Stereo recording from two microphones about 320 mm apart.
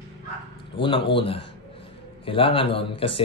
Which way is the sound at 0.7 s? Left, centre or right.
Centre.